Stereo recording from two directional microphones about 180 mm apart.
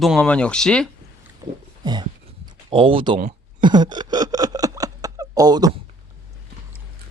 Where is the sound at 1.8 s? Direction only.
25° right (ahead or behind).